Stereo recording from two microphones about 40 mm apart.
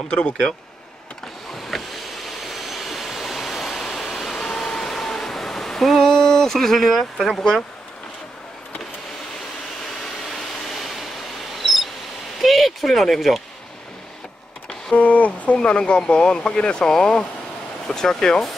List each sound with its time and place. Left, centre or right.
0.1 s speech: left
1.7 s vehicle: centre
2.2 s waterfall: centre
7.2 s speech: centre
10.0 s a sound: centre
11.5 s mouse: centre
12.4 s a sound: centre
15.0 s speech: left
15.5 s speech: left